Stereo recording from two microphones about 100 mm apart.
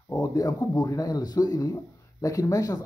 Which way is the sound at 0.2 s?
35° left (ahead or behind).